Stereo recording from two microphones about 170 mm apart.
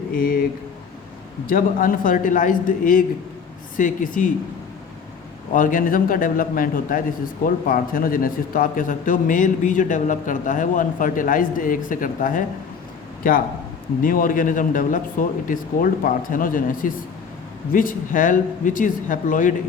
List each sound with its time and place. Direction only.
0.1 s speech: 60° left (ahead or behind)
1.5 s a man's voice: 55° left (ahead or behind)
5.5 s a man's voice: 50° left (ahead or behind)